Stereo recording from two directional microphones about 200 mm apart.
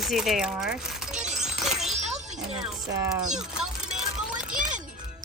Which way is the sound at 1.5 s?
Centre (ahead or behind).